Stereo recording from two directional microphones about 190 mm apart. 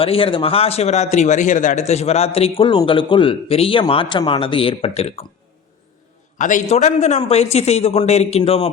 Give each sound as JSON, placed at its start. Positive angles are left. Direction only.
{"t": 0.0, "sound": "a man's voice", "side_deg": 30}
{"t": 6.4, "sound": "a man's voice", "side_deg": 40}